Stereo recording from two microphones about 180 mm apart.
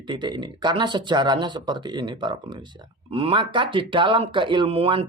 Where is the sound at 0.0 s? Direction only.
25° right (ahead or behind).